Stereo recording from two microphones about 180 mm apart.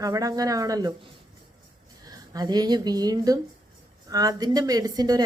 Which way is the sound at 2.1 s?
20° right (ahead or behind).